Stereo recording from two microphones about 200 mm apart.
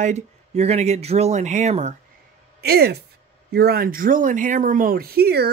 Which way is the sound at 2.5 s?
55° right (ahead or behind).